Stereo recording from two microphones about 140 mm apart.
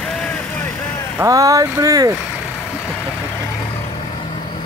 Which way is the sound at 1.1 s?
25° right (ahead or behind).